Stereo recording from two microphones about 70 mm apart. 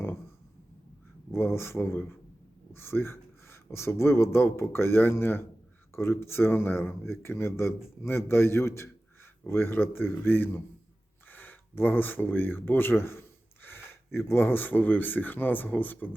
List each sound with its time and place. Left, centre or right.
1.3 s speech: left